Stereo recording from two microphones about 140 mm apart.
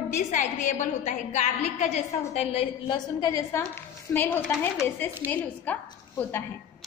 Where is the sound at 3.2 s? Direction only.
25° left (ahead or behind).